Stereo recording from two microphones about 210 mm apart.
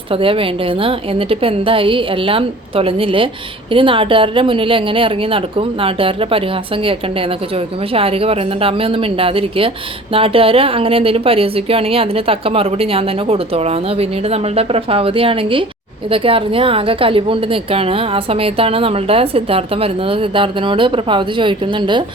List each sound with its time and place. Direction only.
0.1 s a woman's voice: 25° right (ahead or behind)